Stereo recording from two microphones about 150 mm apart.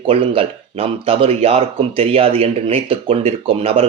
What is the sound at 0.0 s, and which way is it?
Speech, 35° right (ahead or behind).